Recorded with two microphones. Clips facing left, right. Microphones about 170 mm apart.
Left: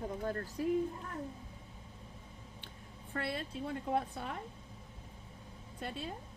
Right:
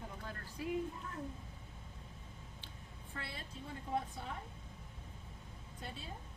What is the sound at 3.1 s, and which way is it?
A woman's voice, 65° left (ahead or behind).